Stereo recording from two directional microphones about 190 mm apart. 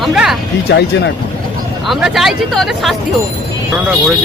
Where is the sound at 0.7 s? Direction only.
60° left (ahead or behind).